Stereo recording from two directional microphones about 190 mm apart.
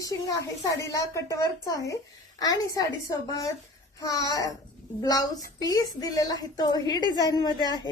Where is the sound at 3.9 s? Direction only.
20° left (ahead or behind).